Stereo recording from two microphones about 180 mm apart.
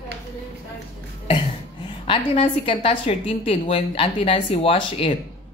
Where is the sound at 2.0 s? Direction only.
30° left (ahead or behind).